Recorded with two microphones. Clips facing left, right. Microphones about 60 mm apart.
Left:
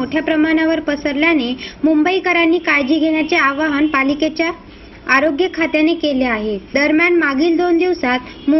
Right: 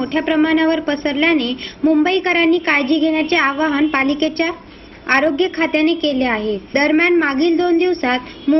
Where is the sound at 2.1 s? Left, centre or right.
Left.